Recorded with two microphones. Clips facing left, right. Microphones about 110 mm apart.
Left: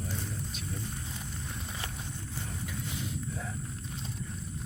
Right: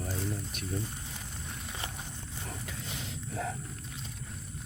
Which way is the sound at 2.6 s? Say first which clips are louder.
Left 3 dB; 90° right.